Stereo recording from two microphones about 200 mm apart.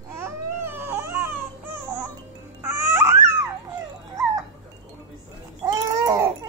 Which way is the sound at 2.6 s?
10° right (ahead or behind).